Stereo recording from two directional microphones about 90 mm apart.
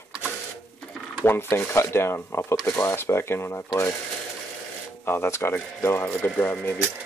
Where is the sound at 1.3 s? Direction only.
25° left (ahead or behind).